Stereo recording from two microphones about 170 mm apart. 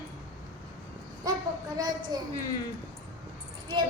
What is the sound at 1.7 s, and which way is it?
Speech, 25° right (ahead or behind).